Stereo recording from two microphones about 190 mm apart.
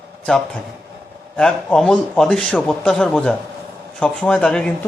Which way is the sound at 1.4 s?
5° left (ahead or behind).